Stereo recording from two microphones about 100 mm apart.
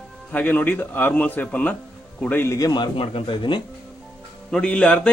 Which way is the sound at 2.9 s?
70° left (ahead or behind).